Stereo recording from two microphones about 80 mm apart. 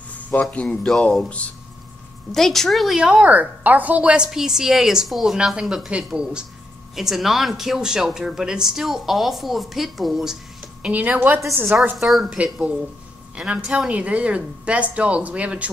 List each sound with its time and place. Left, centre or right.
0.3 s speech: centre
2.3 s speech: centre
3.0 s a woman's voice: centre
10.8 s speech: centre
12.0 s a woman's voice: centre